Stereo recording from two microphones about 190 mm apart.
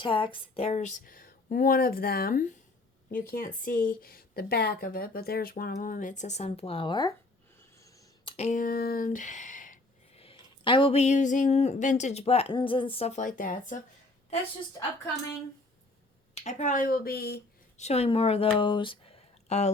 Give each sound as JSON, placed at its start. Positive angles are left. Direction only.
{"t": 0.0, "sound": "a woman's voice", "side_deg": 25}
{"t": 7.8, "sound": "a sound", "side_deg": 15}
{"t": 8.2, "sound": "speech", "side_deg": 30}
{"t": 10.2, "sound": "speech", "side_deg": 30}
{"t": 16.3, "sound": "a woman's voice", "side_deg": 35}
{"t": 17.7, "sound": "speech", "side_deg": 35}
{"t": 18.6, "sound": "a sound", "side_deg": 25}